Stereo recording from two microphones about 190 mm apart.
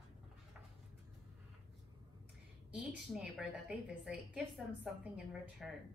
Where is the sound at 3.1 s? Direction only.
5° right (ahead or behind).